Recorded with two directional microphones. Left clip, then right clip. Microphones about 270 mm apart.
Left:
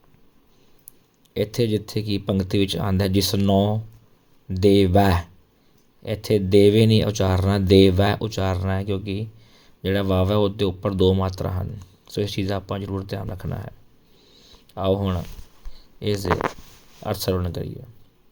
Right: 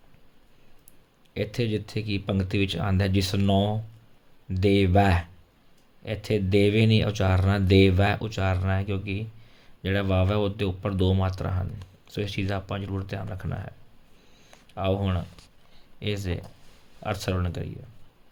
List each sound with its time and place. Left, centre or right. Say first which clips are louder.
1.3 s speech: left 6 dB; centre
14.3 s a sound: left 3 dB; centre
16.0 s speech: left 10 dB; centre